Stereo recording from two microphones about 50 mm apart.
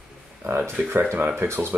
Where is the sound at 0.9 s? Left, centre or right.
Right.